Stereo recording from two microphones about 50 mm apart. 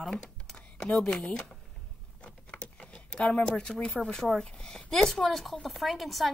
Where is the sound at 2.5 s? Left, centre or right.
Left.